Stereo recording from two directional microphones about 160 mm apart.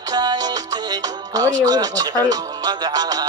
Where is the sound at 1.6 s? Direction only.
25° right (ahead or behind).